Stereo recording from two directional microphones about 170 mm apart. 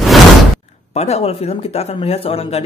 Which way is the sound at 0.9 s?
40° left (ahead or behind).